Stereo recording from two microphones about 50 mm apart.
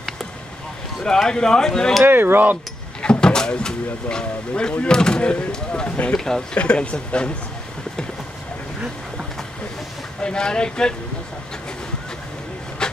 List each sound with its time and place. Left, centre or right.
1.0 s speech: centre
2.0 s speech: right
3.0 s speech: centre
6.5 s speech: left
10.2 s speech: centre
12.8 s vehicle: centre